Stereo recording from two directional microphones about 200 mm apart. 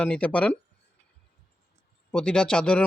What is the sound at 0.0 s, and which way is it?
Speech, 5° left (ahead or behind).